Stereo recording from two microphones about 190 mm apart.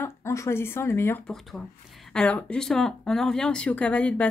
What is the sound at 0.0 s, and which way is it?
Speech, 15° left (ahead or behind).